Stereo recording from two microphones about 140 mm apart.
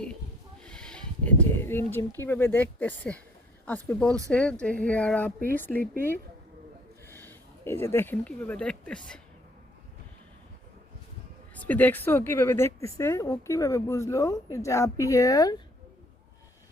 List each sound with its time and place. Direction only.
0.6 s speech: 5° left (ahead or behind)
7.1 s speech: 15° left (ahead or behind)
11.6 s a woman's voice: 10° left (ahead or behind)